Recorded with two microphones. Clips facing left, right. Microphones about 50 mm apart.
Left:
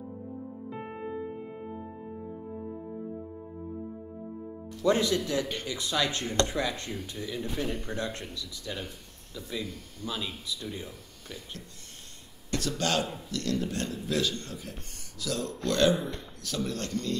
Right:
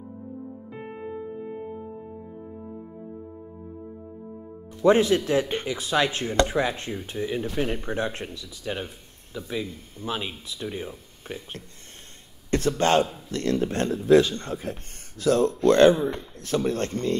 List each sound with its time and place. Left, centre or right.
0.7 s music: centre
4.8 s speech: right
6.6 s speech: right